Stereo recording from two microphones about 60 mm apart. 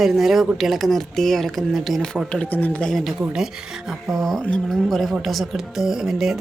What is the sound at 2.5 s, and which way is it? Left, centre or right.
Speech, left.